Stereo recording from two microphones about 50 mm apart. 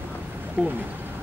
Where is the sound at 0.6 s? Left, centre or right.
Right.